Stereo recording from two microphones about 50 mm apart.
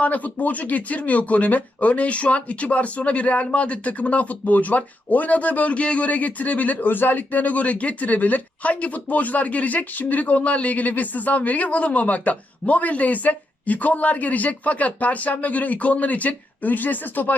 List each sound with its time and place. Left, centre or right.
0.0 s a man's voice: left